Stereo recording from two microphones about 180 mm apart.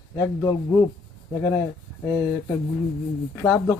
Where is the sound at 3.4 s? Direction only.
15° left (ahead or behind).